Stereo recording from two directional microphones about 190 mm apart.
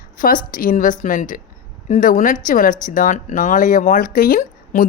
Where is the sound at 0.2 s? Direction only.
45° left (ahead or behind).